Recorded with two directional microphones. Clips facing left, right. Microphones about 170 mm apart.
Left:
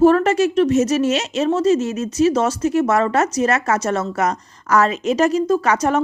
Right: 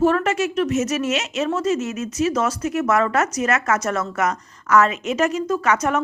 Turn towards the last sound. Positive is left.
turn(degrees=30)  # may be behind; listen again after turning